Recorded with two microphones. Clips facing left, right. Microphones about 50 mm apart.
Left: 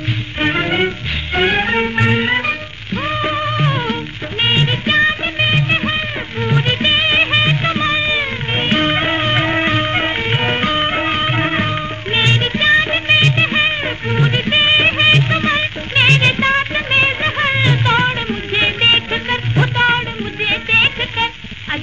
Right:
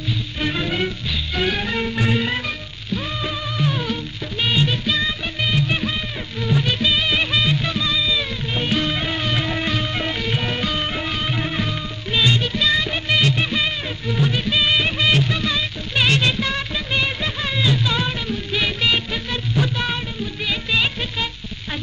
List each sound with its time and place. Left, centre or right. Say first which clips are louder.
0.4 s music: left 7 dB; left